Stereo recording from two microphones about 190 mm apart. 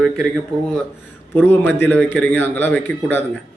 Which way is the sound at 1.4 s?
10° left (ahead or behind).